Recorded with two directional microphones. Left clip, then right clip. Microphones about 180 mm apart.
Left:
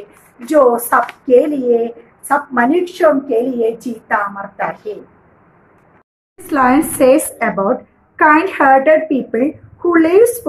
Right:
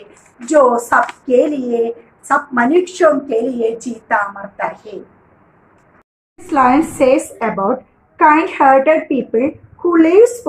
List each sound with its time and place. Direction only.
0.0 s a woman's voice: 10° left (ahead or behind)
6.3 s a woman's voice: 20° left (ahead or behind)